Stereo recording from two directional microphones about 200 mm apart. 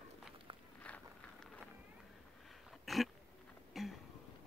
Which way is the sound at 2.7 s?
Centre (ahead or behind).